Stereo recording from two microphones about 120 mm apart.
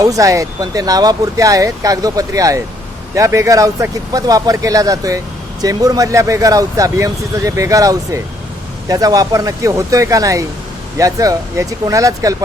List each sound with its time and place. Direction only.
0.0 s speech: 30° right (ahead or behind)